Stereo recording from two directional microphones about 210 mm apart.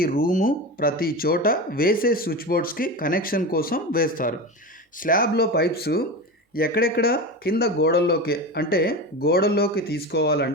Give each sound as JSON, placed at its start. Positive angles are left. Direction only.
{"t": 0.0, "sound": "speech", "side_deg": 45}